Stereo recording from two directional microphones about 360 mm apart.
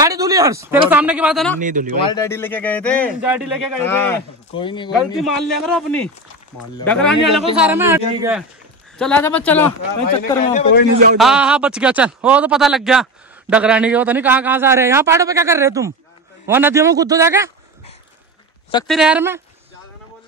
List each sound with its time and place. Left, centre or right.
0.0 s speech: centre
1.6 s speech: right
2.0 s speech: centre
4.9 s speech: centre
10.4 s a man's voice: left
11.1 s speech: centre
18.9 s speech: centre